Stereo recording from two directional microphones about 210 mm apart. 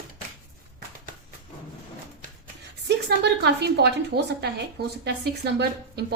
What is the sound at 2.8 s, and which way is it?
A woman's voice, 50° right (ahead or behind).